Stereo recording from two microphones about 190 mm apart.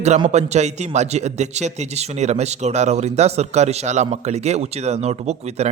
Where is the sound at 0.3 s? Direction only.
35° right (ahead or behind).